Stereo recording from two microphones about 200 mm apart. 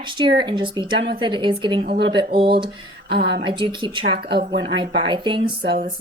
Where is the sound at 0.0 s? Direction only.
25° right (ahead or behind).